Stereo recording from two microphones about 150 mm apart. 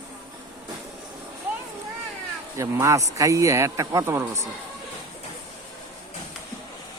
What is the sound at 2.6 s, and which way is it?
A man's voice, 20° right (ahead or behind).